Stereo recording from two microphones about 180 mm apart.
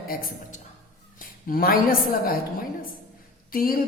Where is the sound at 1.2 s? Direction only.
55° left (ahead or behind).